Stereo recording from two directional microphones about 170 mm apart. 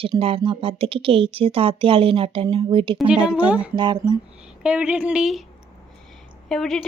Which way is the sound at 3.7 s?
25° right (ahead or behind).